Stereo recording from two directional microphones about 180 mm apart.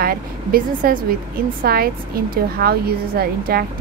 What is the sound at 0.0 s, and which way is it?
Speech, 55° right (ahead or behind).